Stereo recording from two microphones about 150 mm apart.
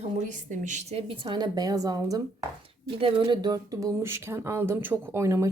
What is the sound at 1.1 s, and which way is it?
Speech, 30° right (ahead or behind).